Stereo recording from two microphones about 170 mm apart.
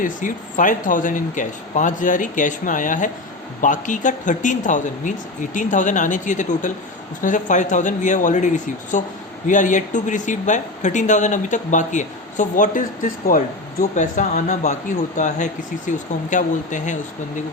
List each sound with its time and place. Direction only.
0.0 s speech: 50° left (ahead or behind)